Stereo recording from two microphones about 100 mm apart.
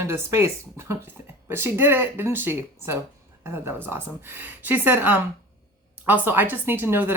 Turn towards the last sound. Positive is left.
turn(degrees=-20)  # may be behind; listen again after turning